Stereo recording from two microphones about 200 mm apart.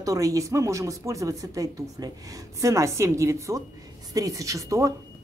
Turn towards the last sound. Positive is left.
turn(degrees=-15)  # may be behind; listen again after turning